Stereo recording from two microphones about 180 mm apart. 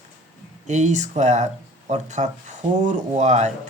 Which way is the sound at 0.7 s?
40° right (ahead or behind).